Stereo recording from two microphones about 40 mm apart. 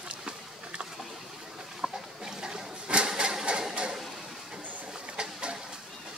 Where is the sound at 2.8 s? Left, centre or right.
Right.